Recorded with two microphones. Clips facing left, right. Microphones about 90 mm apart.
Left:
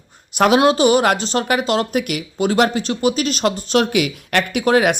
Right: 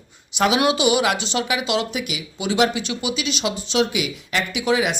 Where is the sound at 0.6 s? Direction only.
40° left (ahead or behind).